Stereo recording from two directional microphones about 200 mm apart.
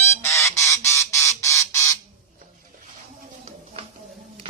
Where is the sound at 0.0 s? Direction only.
15° left (ahead or behind).